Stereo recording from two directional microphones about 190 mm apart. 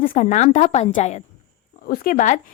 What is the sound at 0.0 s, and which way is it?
A woman's voice, 45° left (ahead or behind).